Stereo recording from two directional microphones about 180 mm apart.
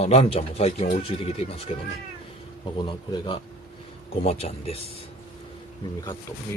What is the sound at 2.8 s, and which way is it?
Speech, 25° left (ahead or behind).